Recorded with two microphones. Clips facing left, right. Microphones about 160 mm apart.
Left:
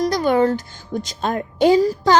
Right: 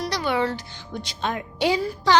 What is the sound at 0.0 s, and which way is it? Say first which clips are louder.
A woman's voice: left 8 dB; 45° left (ahead or behind).